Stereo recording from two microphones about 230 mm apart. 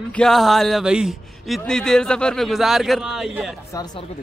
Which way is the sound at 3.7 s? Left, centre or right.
Centre.